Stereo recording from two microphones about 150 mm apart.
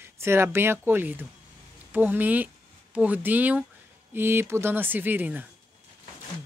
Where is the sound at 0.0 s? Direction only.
15° right (ahead or behind).